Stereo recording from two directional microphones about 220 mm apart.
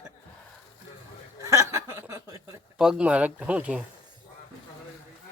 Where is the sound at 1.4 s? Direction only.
15° right (ahead or behind).